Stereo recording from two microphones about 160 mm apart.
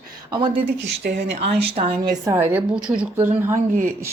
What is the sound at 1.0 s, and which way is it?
Speech, 75° right (ahead or behind).